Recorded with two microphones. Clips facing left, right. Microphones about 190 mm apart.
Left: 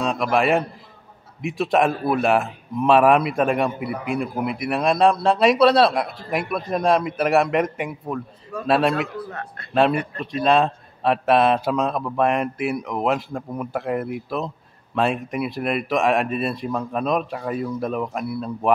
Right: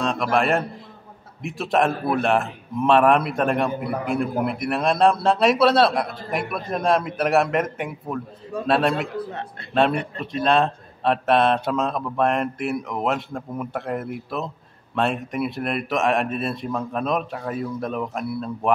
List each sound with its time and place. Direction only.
0.0 s a man's voice: centre (ahead or behind)
9.3 s speech: 25° right (ahead or behind)
9.8 s a man's voice: centre (ahead or behind)